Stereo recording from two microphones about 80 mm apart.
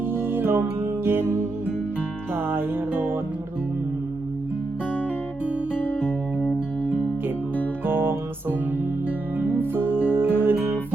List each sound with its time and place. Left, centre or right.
0.0 s music: right
7.9 s music: right
9.6 s music: right